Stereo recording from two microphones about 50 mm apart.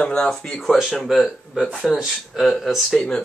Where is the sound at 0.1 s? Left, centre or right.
Centre.